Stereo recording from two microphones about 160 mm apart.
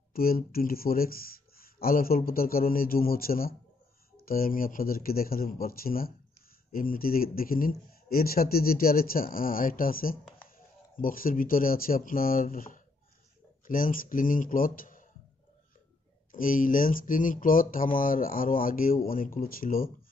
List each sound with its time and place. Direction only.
0.1 s speech: 65° left (ahead or behind)
16.3 s speech: 60° left (ahead or behind)